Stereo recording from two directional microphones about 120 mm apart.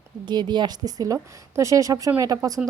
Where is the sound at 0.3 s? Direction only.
40° right (ahead or behind).